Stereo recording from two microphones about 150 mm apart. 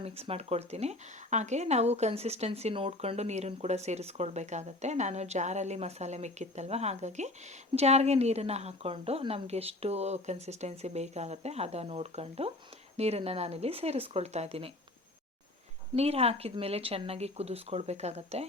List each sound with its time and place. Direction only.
0.0 s speech: 40° right (ahead or behind)
16.0 s speech: 45° right (ahead or behind)